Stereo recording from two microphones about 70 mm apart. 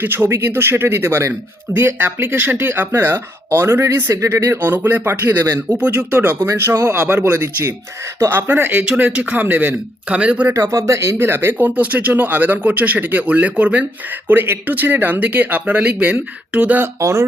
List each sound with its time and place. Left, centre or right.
0.0 s speech: right
6.6 s speech: right
8.2 s speech: right
10.5 s speech: right
17.0 s speech: right